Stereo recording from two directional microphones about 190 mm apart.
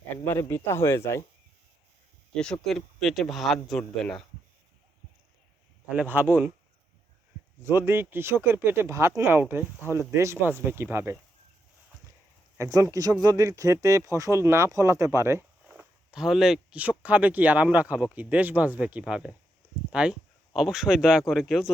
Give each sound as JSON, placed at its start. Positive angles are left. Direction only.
{"t": 0.3, "sound": "speech", "side_deg": 15}
{"t": 2.3, "sound": "speech", "side_deg": 5}
{"t": 5.9, "sound": "speech", "side_deg": -10}
{"t": 7.6, "sound": "speech", "side_deg": -15}
{"t": 12.5, "sound": "speech", "side_deg": -15}
{"t": 15.7, "sound": "speech", "side_deg": -5}